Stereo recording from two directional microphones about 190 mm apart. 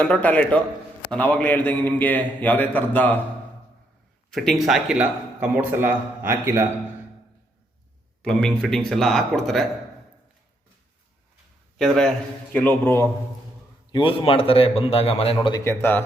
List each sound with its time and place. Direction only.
0.0 s a man's voice: 10° left (ahead or behind)
4.3 s a man's voice: centre (ahead or behind)
8.2 s speech: 5° left (ahead or behind)
11.8 s a man's voice: 5° left (ahead or behind)
13.9 s a man's voice: 25° left (ahead or behind); by 16.0 s 10° left (ahead or behind)